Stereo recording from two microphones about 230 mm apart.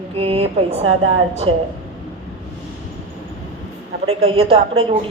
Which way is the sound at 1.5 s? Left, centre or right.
Right.